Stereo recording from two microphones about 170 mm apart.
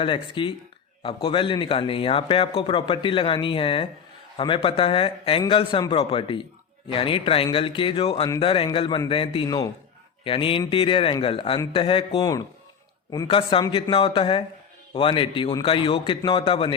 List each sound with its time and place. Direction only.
0.0 s speech: 30° left (ahead or behind)